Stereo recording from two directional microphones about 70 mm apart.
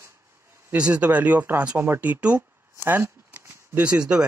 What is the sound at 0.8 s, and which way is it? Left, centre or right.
Speech, centre.